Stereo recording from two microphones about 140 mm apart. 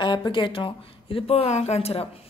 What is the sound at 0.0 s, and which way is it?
Speech, 35° left (ahead or behind).